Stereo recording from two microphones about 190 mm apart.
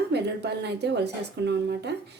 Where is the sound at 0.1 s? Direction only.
60° right (ahead or behind).